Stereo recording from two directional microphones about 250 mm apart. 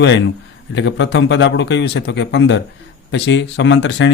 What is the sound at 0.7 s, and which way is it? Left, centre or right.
Speech, left.